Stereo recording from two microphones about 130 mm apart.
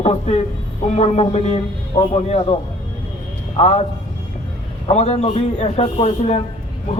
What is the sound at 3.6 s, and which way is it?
Speech, 50° left (ahead or behind).